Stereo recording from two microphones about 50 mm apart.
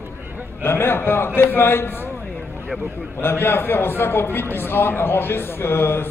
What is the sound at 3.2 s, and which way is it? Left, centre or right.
A man's voice, left.